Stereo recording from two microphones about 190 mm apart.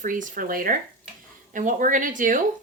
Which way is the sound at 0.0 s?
45° right (ahead or behind).